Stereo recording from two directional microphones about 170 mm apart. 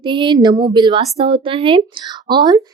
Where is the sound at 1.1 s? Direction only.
35° right (ahead or behind).